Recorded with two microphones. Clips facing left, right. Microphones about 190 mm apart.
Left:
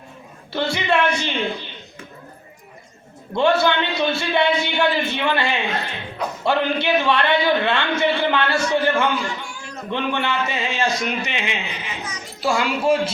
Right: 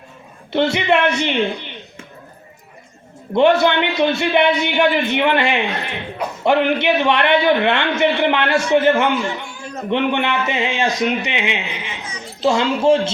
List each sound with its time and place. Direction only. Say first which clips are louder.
0.5 s a man's voice: right 5 dB; 20° right (ahead or behind)
3.3 s a man's voice: right 4 dB; 20° right (ahead or behind)